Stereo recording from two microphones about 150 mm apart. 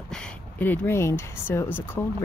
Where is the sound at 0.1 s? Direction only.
10° left (ahead or behind).